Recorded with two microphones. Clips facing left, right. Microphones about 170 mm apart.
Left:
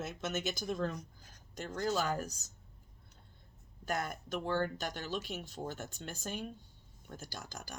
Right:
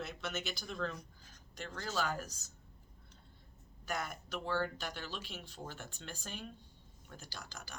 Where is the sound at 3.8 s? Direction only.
50° left (ahead or behind).